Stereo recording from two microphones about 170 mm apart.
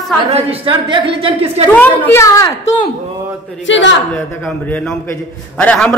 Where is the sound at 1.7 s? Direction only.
10° left (ahead or behind).